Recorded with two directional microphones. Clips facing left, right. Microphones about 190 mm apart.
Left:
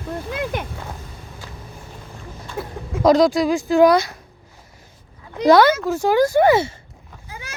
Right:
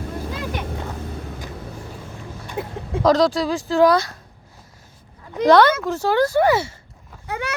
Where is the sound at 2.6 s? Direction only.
15° right (ahead or behind).